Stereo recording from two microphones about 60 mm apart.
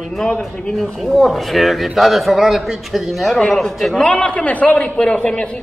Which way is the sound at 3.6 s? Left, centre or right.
Centre.